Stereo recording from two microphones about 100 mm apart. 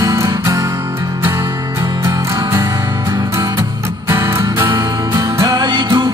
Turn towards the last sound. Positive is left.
turn(degrees=-45)  # may be behind; listen again after turning